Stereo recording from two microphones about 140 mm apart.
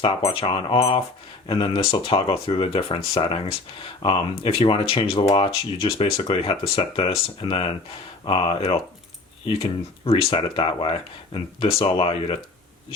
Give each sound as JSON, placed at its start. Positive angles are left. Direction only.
{"t": 0.0, "sound": "speech", "side_deg": 45}